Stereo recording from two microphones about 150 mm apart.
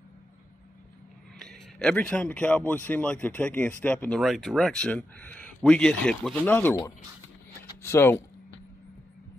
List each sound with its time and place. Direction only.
1.4 s a man's voice: 5° left (ahead or behind)